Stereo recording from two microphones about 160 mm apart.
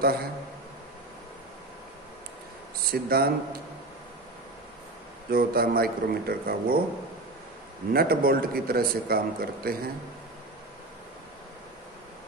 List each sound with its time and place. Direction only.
0.0 s a man's voice: 75° right (ahead or behind)
2.9 s a man's voice: 70° right (ahead or behind)
5.3 s a man's voice: 70° right (ahead or behind)
7.9 s a man's voice: 70° right (ahead or behind)